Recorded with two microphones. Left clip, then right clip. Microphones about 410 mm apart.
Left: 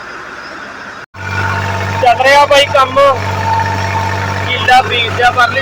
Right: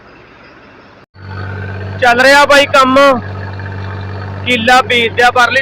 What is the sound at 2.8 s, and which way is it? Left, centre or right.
Speech, right.